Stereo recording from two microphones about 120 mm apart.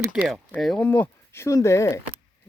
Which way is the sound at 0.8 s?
15° left (ahead or behind).